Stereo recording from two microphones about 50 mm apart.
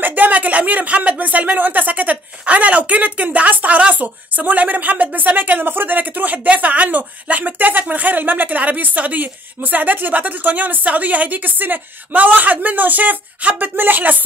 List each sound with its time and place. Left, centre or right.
0.0 s speech: right